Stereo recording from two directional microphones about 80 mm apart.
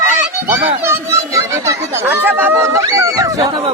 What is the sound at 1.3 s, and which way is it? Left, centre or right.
Speech, right.